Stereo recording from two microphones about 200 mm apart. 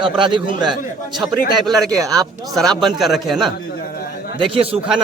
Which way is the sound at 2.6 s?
Centre (ahead or behind).